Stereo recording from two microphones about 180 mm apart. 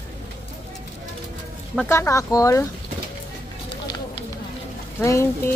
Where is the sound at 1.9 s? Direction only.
15° left (ahead or behind).